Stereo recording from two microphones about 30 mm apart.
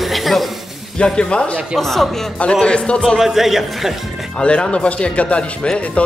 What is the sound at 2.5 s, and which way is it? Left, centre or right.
Speech, left.